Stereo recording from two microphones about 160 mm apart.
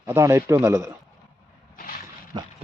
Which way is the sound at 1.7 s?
65° left (ahead or behind).